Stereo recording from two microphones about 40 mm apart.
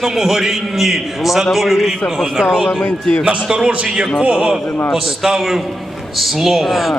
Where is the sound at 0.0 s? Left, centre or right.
Centre.